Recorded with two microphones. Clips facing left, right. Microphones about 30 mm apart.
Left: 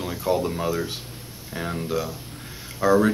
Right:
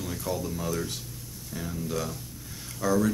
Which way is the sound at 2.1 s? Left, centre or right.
Left.